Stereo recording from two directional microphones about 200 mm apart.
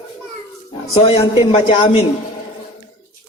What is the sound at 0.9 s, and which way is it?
A man's voice, 25° left (ahead or behind).